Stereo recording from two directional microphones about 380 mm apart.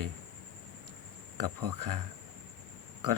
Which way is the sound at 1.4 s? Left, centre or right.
Right.